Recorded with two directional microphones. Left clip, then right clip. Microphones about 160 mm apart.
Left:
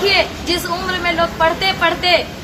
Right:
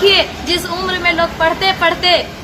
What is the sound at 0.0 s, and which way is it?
Hubbub, 15° right (ahead or behind).